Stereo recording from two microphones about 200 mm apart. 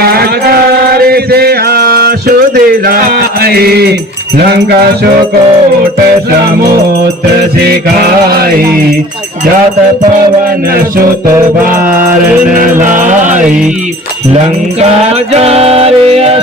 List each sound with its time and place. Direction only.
0.0 s music: 50° right (ahead or behind)
8.3 s music: 50° right (ahead or behind)
13.0 s music: 40° right (ahead or behind)
15.3 s music: 30° right (ahead or behind)